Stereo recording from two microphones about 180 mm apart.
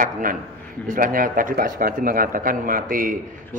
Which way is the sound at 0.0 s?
50° right (ahead or behind).